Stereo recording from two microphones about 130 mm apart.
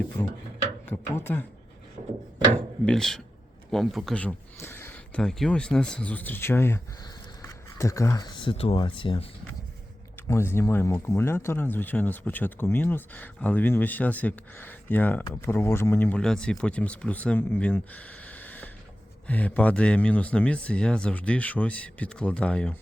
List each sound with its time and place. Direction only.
0.2 s speech: 20° left (ahead or behind)
2.8 s speech: 5° left (ahead or behind)
4.2 s speech: 15° left (ahead or behind); by 9.2 s 40° left (ahead or behind)
10.2 s speech: 20° left (ahead or behind)